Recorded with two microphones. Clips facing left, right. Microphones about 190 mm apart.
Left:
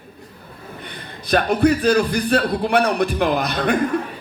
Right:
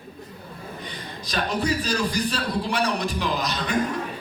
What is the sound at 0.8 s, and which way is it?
A man's voice, 60° left (ahead or behind).